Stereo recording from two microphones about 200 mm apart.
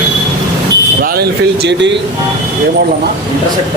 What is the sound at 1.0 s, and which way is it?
Speech, 50° right (ahead or behind).